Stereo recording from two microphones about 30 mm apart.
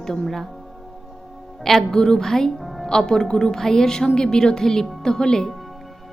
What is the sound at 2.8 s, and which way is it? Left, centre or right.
A woman's voice, centre.